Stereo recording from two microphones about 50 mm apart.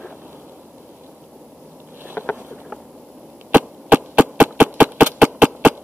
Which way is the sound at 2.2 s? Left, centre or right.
Left.